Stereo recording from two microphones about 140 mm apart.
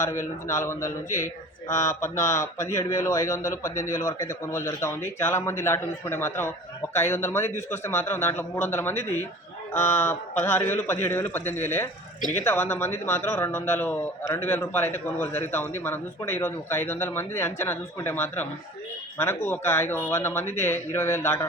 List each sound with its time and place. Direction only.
0.0 s a man's voice: 20° left (ahead or behind)